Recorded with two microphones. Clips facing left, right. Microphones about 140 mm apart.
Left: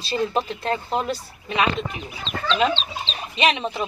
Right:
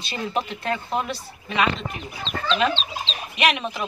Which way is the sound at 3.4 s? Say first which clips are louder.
Left 1 dB; 25° left (ahead or behind).